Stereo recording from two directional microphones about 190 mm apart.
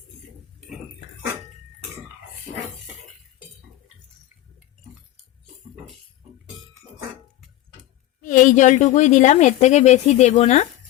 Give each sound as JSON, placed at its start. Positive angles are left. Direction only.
{"t": 8.2, "sound": "a woman's voice", "side_deg": 45}